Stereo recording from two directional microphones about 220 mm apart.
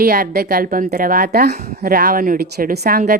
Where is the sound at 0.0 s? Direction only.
40° right (ahead or behind).